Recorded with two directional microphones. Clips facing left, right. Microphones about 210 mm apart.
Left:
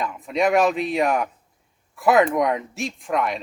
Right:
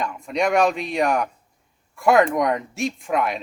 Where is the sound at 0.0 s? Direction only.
Centre (ahead or behind).